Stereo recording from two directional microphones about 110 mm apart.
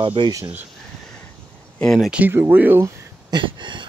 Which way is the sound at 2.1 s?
15° right (ahead or behind).